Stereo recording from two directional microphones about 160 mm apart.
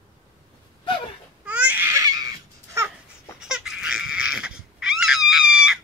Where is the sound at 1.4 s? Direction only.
10° right (ahead or behind).